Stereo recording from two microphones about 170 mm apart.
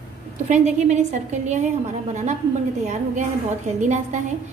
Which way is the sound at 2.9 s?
45° right (ahead or behind).